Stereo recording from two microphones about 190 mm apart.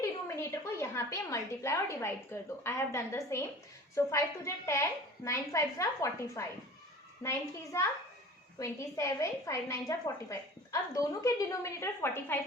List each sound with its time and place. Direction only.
0.0 s a woman's voice: 15° left (ahead or behind)